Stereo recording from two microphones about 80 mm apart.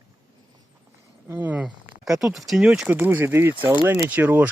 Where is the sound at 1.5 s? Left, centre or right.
Centre.